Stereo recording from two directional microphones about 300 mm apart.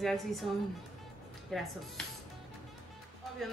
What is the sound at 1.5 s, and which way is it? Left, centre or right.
Speech, centre.